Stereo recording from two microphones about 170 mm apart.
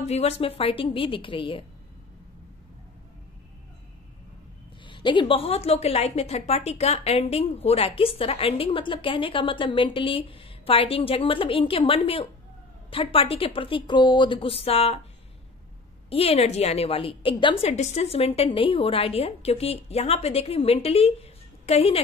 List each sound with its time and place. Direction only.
0.0 s a woman's voice: 40° left (ahead or behind)
4.8 s a woman's voice: 30° left (ahead or behind)
16.1 s a woman's voice: 35° left (ahead or behind)